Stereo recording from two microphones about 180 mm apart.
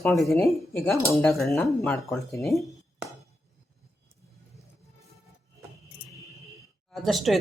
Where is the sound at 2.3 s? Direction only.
15° left (ahead or behind).